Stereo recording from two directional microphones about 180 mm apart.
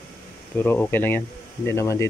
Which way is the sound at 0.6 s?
10° left (ahead or behind).